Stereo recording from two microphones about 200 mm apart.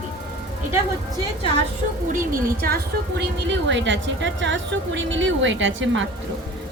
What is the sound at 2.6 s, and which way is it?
A woman's voice, 55° right (ahead or behind).